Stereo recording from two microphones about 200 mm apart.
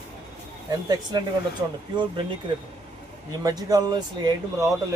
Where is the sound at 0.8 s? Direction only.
20° right (ahead or behind).